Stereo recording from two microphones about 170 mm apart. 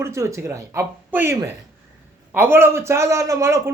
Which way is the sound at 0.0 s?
15° right (ahead or behind).